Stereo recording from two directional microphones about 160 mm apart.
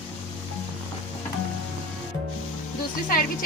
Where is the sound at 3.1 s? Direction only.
60° left (ahead or behind).